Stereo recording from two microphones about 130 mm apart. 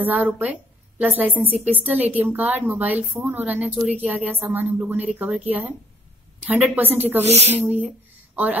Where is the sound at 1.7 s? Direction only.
15° right (ahead or behind).